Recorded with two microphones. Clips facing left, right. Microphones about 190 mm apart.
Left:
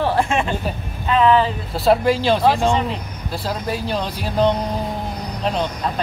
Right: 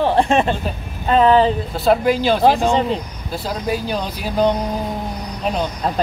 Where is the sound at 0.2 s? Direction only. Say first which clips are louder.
Right 4 dB; 35° right (ahead or behind).